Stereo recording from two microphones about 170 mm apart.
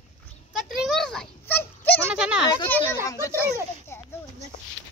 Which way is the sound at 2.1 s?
5° right (ahead or behind).